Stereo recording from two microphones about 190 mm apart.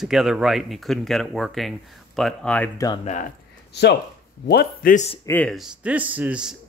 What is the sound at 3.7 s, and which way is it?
A man's voice, 65° left (ahead or behind).